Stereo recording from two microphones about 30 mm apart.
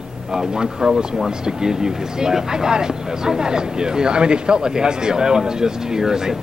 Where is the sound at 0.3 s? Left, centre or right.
Right.